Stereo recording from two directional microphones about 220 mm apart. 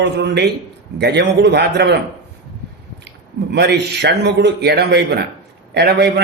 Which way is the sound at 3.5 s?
50° right (ahead or behind).